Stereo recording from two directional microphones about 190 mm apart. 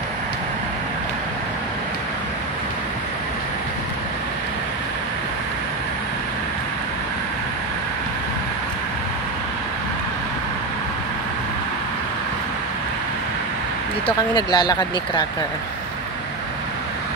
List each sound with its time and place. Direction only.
14.0 s speech: 20° left (ahead or behind)